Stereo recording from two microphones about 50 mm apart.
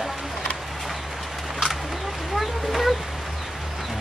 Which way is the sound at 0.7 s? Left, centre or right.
Centre.